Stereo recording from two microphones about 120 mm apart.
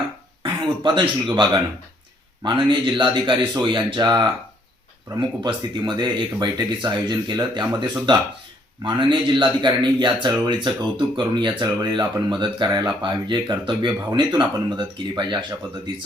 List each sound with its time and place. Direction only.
0.4 s a man's voice: 45° right (ahead or behind)
5.5 s a man's voice: 40° right (ahead or behind)